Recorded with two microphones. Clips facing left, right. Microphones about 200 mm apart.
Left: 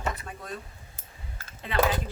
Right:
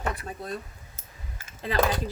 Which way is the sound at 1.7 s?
35° right (ahead or behind).